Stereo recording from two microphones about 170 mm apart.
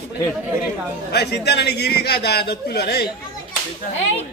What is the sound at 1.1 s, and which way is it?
A man's voice, 75° left (ahead or behind).